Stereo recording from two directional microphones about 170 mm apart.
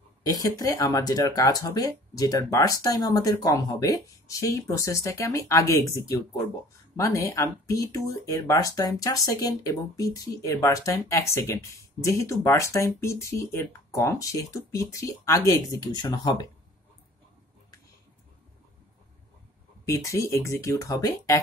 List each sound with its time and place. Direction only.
0.2 s speech: 20° left (ahead or behind)
19.8 s speech: 15° left (ahead or behind)